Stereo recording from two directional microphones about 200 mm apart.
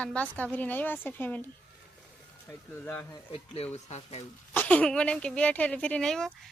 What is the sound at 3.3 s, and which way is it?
Speech, 30° left (ahead or behind).